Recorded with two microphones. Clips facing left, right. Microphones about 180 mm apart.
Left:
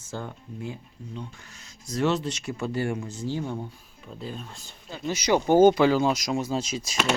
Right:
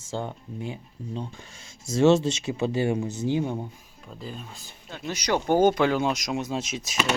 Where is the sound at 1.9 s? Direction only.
25° right (ahead or behind).